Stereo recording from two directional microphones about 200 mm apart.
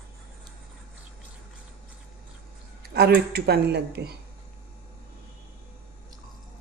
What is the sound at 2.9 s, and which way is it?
Speech, 50° right (ahead or behind).